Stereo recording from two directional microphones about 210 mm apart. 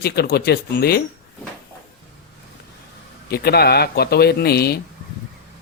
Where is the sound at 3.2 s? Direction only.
50° left (ahead or behind).